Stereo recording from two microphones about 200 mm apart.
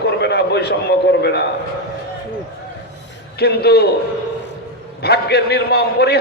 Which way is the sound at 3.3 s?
55° left (ahead or behind).